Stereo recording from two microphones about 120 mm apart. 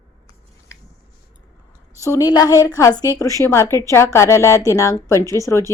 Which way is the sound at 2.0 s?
25° left (ahead or behind).